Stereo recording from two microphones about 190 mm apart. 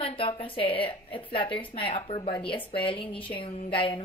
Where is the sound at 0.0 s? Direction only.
25° left (ahead or behind).